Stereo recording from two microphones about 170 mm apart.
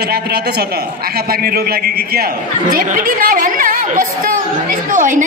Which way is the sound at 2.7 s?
50° right (ahead or behind).